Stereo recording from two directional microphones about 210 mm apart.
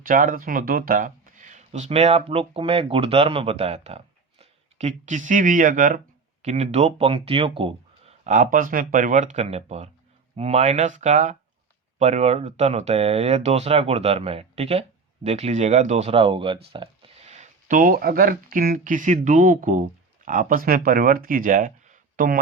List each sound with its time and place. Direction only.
0.0 s speech: 40° right (ahead or behind); by 16.6 s 25° right (ahead or behind)
16.7 s a sound: 25° right (ahead or behind); by 18.3 s 45° right (ahead or behind)
18.5 s speech: 45° right (ahead or behind)